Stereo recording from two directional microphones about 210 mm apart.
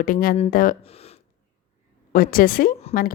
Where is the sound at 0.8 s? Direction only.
30° left (ahead or behind).